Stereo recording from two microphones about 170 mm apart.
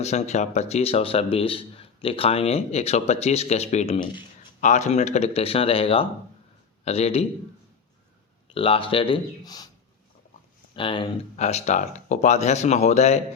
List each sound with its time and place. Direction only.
0.0 s speech: 40° left (ahead or behind)
8.4 s speech: 35° left (ahead or behind)
10.8 s speech: 30° left (ahead or behind)
11.3 s speech: 40° left (ahead or behind)